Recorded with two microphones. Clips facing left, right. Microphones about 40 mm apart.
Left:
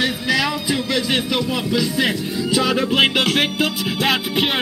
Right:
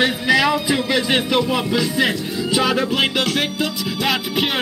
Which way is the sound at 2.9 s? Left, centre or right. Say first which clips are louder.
Left 2 dB; centre.